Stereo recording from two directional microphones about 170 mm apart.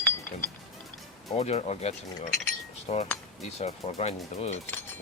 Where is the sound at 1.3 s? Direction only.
40° left (ahead or behind).